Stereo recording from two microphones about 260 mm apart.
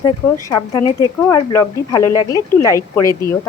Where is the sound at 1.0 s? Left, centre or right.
Centre.